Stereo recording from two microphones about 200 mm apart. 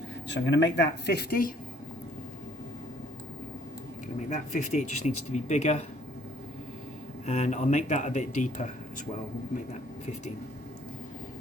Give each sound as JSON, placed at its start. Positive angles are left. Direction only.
{"t": 0.3, "sound": "speech", "side_deg": 60}
{"t": 4.3, "sound": "speech", "side_deg": 35}
{"t": 7.3, "sound": "speech", "side_deg": 35}